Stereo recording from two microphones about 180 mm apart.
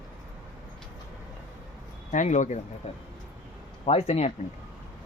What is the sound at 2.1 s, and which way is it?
Speech, 45° left (ahead or behind).